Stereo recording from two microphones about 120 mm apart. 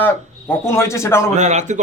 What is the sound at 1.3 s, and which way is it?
Speech, 75° right (ahead or behind).